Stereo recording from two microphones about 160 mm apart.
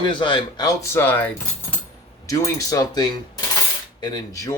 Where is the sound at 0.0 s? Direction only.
30° left (ahead or behind); by 1.3 s 10° left (ahead or behind).